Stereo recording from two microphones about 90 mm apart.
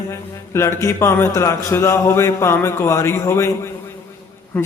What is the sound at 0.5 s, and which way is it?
A man's voice, 30° left (ahead or behind).